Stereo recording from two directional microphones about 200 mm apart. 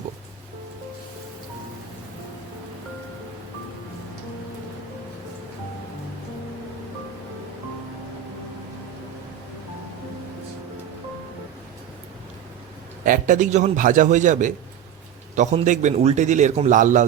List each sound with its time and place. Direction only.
13.1 s a man's voice: 40° right (ahead or behind)